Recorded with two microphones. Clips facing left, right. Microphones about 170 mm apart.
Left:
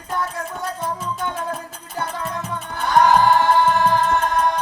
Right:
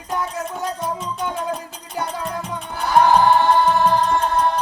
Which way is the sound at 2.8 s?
10° right (ahead or behind).